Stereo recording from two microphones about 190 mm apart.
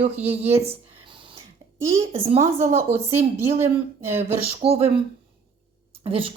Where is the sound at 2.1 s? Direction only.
35° right (ahead or behind).